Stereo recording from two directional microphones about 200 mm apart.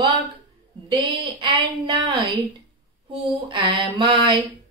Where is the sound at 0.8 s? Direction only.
25° right (ahead or behind).